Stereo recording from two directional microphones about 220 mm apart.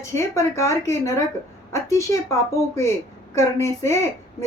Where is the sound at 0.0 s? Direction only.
15° left (ahead or behind).